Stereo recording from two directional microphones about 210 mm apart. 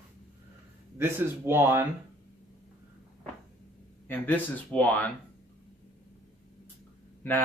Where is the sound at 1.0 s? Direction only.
10° right (ahead or behind).